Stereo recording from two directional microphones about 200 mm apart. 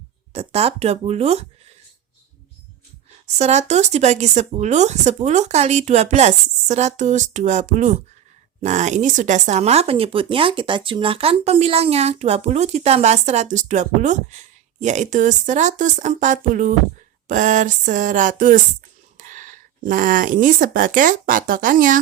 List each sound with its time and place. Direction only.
0.3 s speech: 30° right (ahead or behind)
3.2 s speech: 35° right (ahead or behind)